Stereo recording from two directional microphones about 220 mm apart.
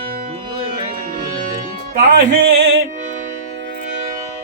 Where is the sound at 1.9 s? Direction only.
50° right (ahead or behind).